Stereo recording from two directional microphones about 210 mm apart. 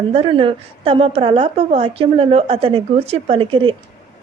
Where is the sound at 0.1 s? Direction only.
25° right (ahead or behind).